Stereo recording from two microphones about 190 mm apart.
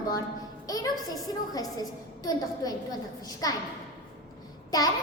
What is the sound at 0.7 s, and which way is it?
A woman's voice, 20° left (ahead or behind).